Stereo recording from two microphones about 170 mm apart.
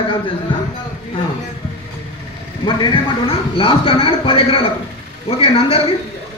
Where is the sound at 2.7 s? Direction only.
30° left (ahead or behind).